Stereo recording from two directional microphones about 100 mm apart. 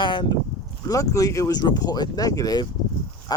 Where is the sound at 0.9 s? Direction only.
35° left (ahead or behind).